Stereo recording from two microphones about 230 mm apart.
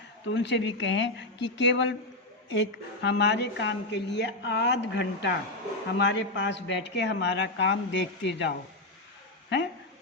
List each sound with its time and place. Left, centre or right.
0.3 s a woman's voice: left